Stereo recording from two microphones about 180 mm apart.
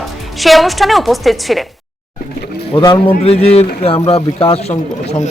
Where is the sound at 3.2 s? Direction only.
35° left (ahead or behind).